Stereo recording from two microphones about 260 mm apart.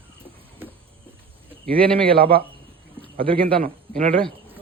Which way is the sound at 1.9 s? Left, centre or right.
Right.